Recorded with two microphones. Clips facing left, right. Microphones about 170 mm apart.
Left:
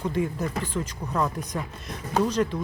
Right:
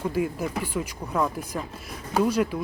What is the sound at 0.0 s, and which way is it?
Speech, 5° right (ahead or behind).